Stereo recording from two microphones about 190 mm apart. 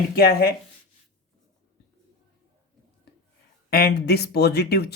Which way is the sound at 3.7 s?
55° left (ahead or behind).